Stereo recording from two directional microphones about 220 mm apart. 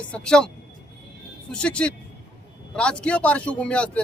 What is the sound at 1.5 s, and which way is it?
A man's voice, 5° left (ahead or behind).